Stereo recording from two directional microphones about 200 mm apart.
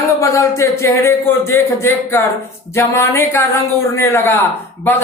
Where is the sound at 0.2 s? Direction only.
15° left (ahead or behind).